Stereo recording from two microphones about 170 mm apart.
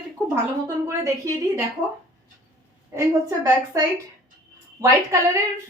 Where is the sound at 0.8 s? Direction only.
20° right (ahead or behind).